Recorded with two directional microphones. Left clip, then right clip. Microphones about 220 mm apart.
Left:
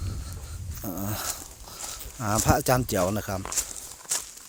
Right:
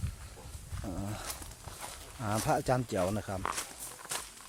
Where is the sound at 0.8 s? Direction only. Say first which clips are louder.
Left 7 dB; 25° left (ahead or behind).